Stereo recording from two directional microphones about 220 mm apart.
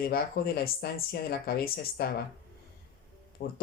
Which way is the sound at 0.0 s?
45° left (ahead or behind).